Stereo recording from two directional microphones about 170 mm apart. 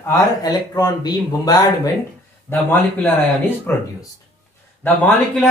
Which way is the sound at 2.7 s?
10° left (ahead or behind).